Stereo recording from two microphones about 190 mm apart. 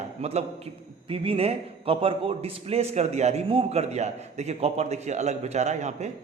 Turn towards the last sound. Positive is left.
turn(degrees=-35)  # may be behind; listen again after turning